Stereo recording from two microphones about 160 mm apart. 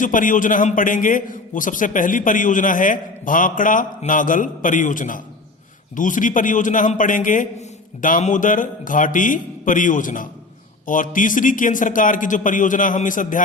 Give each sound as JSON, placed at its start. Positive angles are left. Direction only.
{"t": 0.0, "sound": "a man's voice", "side_deg": 55}